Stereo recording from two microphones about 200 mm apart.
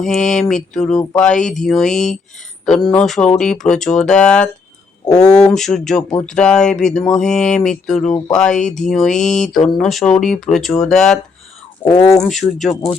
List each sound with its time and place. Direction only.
0.0 s speech: centre (ahead or behind)
11.9 s speech: 15° left (ahead or behind)
12.2 s speech: centre (ahead or behind)